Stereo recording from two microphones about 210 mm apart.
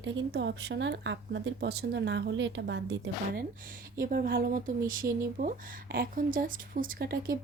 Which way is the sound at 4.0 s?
45° right (ahead or behind).